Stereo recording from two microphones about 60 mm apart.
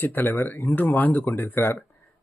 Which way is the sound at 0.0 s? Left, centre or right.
Left.